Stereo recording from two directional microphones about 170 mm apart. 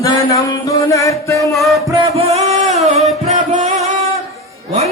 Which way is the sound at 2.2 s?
40° right (ahead or behind).